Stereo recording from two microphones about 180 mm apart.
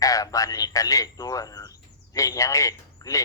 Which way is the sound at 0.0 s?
20° left (ahead or behind).